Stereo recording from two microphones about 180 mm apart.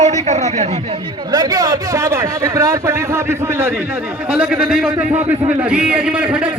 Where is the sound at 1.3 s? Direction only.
20° right (ahead or behind).